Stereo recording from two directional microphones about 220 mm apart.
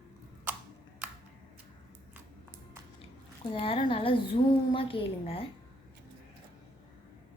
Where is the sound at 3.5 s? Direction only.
25° left (ahead or behind).